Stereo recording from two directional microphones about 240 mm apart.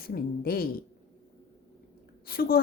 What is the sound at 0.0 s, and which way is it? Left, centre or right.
Speech, left.